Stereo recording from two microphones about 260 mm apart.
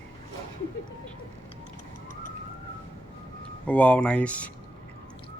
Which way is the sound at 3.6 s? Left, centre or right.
Centre.